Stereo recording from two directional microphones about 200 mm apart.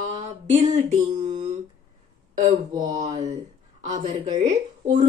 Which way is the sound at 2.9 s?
35° right (ahead or behind).